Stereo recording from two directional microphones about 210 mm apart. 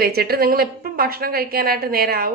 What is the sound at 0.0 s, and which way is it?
A woman's voice, 45° right (ahead or behind).